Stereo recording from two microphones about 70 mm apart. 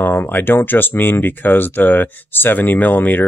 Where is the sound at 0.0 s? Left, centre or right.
Left.